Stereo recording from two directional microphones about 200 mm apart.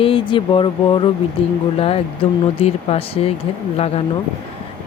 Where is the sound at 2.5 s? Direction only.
30° left (ahead or behind).